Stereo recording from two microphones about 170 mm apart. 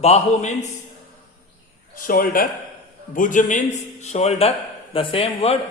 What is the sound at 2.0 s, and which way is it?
A man's voice, 55° left (ahead or behind).